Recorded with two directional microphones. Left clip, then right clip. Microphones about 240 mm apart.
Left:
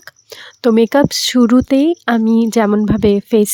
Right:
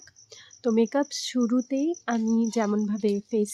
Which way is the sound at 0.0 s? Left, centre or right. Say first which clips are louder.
Left 15 dB; left.